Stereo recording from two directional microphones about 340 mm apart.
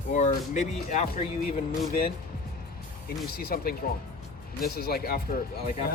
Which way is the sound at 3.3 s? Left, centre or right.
Left.